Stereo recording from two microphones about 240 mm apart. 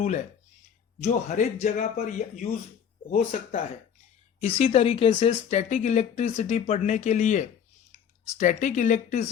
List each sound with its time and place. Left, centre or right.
1.0 s a man's voice: left